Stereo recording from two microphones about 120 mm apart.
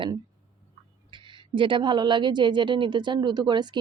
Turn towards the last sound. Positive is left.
turn(degrees=-40)  # may be behind; listen again after turning